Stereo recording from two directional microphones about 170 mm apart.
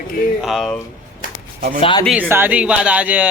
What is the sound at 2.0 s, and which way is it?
Speech, 10° right (ahead or behind).